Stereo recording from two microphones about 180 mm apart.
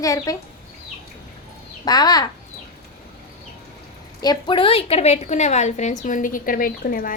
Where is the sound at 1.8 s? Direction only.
20° left (ahead or behind).